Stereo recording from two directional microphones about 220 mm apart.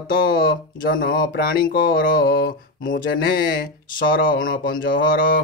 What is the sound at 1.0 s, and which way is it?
Speech, 40° left (ahead or behind).